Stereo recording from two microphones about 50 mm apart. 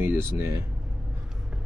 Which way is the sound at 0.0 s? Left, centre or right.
Right.